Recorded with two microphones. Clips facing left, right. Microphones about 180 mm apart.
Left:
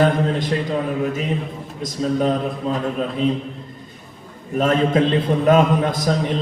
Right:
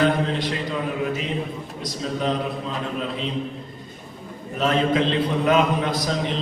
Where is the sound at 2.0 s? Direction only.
45° left (ahead or behind).